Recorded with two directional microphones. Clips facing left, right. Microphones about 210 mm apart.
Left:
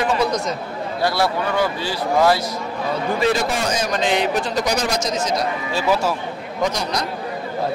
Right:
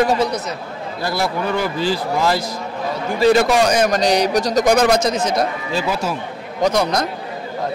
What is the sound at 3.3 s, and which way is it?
Speech, 65° right (ahead or behind).